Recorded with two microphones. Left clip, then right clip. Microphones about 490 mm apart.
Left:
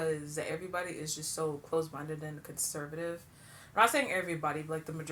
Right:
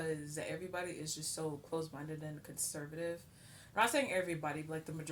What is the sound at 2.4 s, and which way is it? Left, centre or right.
Speech, right.